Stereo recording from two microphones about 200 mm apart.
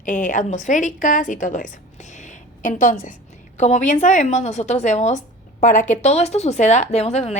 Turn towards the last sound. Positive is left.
turn(degrees=30)  # may be behind; listen again after turning